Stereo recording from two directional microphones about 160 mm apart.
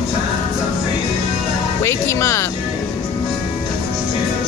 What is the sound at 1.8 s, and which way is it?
Speech, 20° left (ahead or behind).